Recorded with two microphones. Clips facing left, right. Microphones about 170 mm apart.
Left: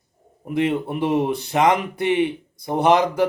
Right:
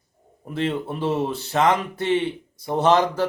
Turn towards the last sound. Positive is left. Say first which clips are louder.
# left 1 dB
turn(degrees=15)  # may be behind; listen again after turning